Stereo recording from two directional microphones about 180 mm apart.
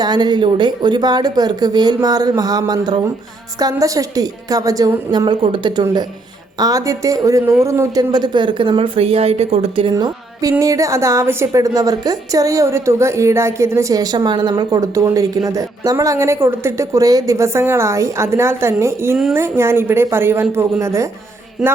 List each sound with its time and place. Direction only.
0.0 s speech: 25° right (ahead or behind)
9.9 s a woman's voice: 20° right (ahead or behind)
21.6 s music: 5° right (ahead or behind)